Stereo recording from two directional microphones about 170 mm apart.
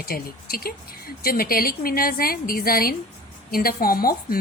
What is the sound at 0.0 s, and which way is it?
Speech, 60° left (ahead or behind).